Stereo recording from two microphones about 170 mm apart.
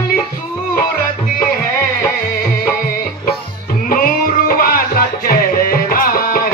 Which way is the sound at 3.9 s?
55° left (ahead or behind).